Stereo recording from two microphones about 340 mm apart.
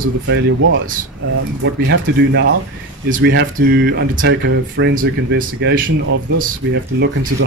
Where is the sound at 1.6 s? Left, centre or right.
Right.